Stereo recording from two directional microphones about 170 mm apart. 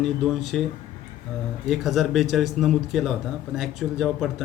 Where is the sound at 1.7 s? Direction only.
Centre (ahead or behind).